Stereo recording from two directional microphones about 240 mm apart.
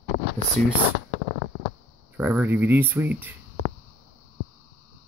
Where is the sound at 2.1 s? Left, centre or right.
Centre.